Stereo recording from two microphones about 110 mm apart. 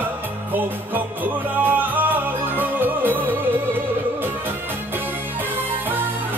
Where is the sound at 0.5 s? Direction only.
15° right (ahead or behind).